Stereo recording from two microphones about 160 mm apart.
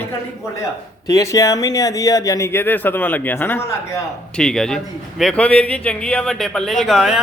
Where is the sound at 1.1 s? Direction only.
20° left (ahead or behind).